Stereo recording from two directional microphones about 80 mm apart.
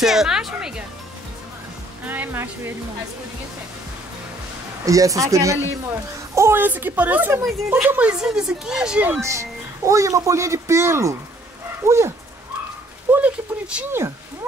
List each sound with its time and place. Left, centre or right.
0.0 s a woman's voice: centre
2.0 s a woman's voice: right
4.8 s speech: right
6.5 s a woman's voice: right; by 9.0 s centre
9.2 s speech: right
13.1 s speech: centre